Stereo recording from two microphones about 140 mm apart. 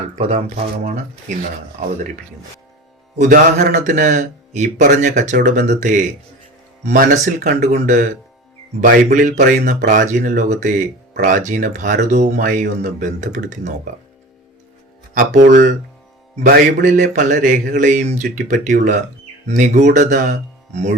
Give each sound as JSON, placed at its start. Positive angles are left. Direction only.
{"t": 0.2, "sound": "speech", "side_deg": -45}
{"t": 1.8, "sound": "speech", "side_deg": -75}
{"t": 3.2, "sound": "a man's voice", "side_deg": -70}
{"t": 8.8, "sound": "speech", "side_deg": -80}
{"t": 15.1, "sound": "speech", "side_deg": -70}
{"t": 16.5, "sound": "a man's voice", "side_deg": -75}